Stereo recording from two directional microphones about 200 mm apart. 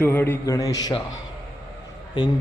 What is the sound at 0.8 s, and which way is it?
Speech, 20° left (ahead or behind).